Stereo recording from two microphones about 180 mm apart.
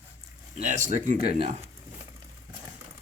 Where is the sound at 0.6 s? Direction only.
45° right (ahead or behind).